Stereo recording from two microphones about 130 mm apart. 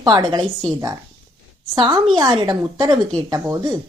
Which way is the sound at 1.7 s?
35° right (ahead or behind).